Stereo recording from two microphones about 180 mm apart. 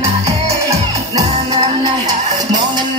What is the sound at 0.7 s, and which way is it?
Music, 20° right (ahead or behind).